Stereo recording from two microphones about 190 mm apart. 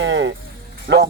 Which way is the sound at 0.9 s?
65° right (ahead or behind).